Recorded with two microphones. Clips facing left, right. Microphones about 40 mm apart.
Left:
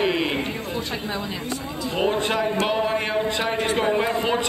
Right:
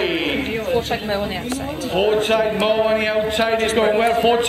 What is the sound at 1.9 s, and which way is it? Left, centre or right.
Speech, right.